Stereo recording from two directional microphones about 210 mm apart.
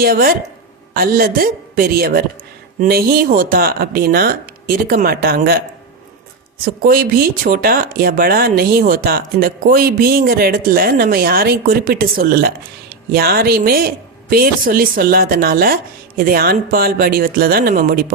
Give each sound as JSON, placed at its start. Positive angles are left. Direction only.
{"t": 0.0, "sound": "speech", "side_deg": -45}
{"t": 6.8, "sound": "speech", "side_deg": -45}